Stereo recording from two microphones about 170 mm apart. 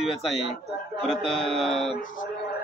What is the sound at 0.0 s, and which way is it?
A man's voice, centre (ahead or behind).